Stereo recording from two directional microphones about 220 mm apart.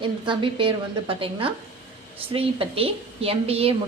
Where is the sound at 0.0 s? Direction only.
20° right (ahead or behind).